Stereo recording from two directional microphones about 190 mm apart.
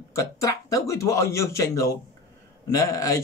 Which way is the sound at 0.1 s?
15° left (ahead or behind).